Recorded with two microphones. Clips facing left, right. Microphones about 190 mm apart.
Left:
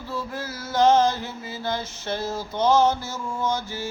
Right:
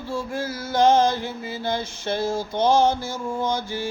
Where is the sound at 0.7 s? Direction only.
10° right (ahead or behind).